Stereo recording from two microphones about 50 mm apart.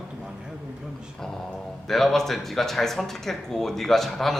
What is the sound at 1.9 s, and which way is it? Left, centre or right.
Speech, centre.